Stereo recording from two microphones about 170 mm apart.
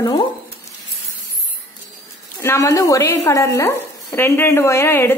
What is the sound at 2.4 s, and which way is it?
Speech, 15° left (ahead or behind).